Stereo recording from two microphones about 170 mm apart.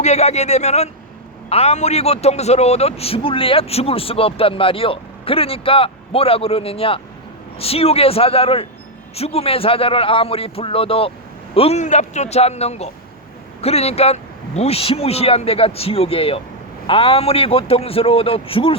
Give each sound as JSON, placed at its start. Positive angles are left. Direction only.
{"t": 0.0, "sound": "a man's voice", "side_deg": 40}